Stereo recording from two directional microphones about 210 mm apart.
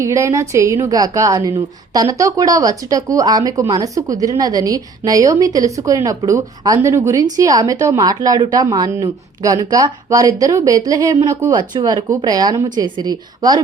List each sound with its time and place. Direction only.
0.0 s a woman's voice: 15° right (ahead or behind)